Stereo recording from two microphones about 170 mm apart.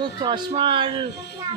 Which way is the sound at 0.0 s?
30° right (ahead or behind).